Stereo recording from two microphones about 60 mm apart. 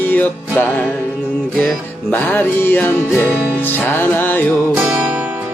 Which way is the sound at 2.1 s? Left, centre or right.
Left.